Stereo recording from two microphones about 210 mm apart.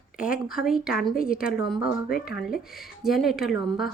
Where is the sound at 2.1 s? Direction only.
45° left (ahead or behind).